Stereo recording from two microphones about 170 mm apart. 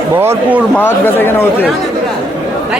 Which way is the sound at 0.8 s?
10° left (ahead or behind).